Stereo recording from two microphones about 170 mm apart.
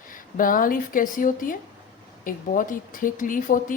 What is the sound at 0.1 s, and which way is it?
A woman's voice, 55° left (ahead or behind).